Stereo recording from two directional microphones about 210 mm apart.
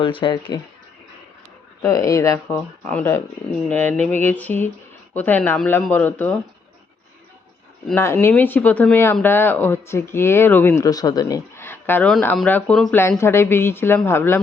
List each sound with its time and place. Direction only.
0.0 s speech: 25° left (ahead or behind)
1.8 s speech: 15° left (ahead or behind)
7.9 s speech: 10° left (ahead or behind)